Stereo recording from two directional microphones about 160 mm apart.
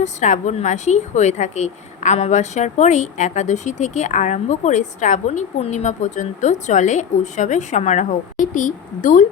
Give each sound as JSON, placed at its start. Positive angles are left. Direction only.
{"t": 0.0, "sound": "a woman's voice", "side_deg": 45}